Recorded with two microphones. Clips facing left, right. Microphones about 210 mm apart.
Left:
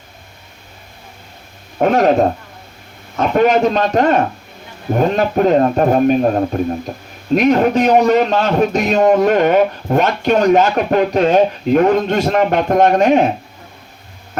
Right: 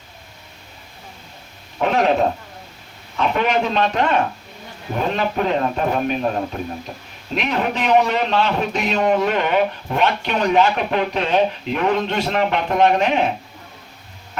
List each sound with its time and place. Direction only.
1.8 s a man's voice: 45° left (ahead or behind)